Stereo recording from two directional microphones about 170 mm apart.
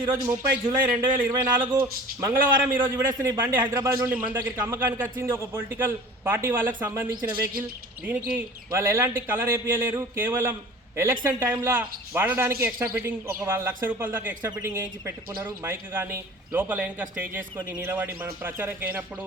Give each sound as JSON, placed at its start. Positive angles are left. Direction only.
{"t": 0.1, "sound": "speech", "side_deg": -10}
{"t": 1.3, "sound": "a man's voice", "side_deg": -30}
{"t": 1.8, "sound": "speech", "side_deg": -15}